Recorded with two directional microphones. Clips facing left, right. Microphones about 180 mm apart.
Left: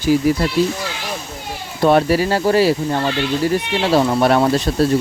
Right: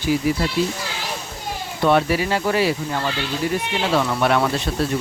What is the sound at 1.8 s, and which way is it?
Speech, 40° left (ahead or behind).